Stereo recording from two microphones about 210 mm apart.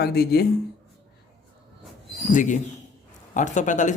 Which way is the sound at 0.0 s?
45° left (ahead or behind).